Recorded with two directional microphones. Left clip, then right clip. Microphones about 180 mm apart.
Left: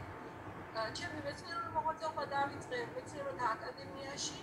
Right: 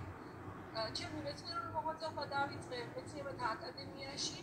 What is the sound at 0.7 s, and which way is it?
A woman's voice, 10° left (ahead or behind).